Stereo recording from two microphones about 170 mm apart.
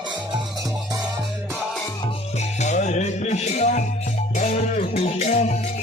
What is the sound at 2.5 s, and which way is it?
Music, 45° left (ahead or behind).